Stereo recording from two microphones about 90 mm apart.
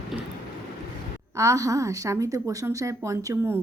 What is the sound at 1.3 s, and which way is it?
A woman's voice, 35° right (ahead or behind).